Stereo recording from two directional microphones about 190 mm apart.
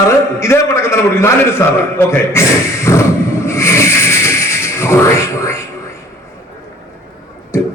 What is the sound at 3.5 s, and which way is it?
Music, 15° left (ahead or behind).